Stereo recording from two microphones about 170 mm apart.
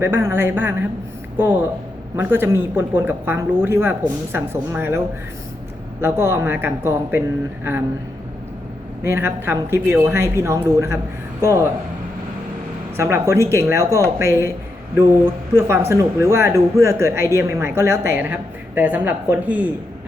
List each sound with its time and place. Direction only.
0.0 s speech: 15° right (ahead or behind)
9.0 s speech: 15° right (ahead or behind)
13.0 s speech: 15° right (ahead or behind)
15.5 s speech: 15° right (ahead or behind)